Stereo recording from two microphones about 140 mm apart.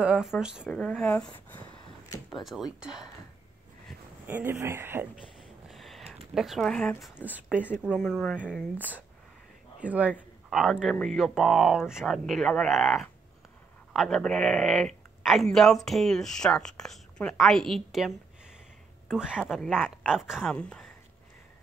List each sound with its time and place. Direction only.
0.0 s speech: 5° right (ahead or behind)
0.7 s speech: 5° left (ahead or behind)
2.3 s speech: centre (ahead or behind)
4.3 s speech: 15° right (ahead or behind)
5.7 s a sound: centre (ahead or behind)
6.3 s speech: centre (ahead or behind)
7.2 s speech: 15° left (ahead or behind)
8.0 s speech: centre (ahead or behind)
9.8 s a man's voice: 10° right (ahead or behind); by 20.9 s 5° left (ahead or behind)